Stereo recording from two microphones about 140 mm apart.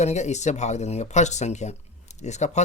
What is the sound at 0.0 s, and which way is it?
Speech, 55° left (ahead or behind).